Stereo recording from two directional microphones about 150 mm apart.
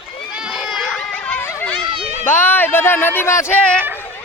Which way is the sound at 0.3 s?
5° right (ahead or behind).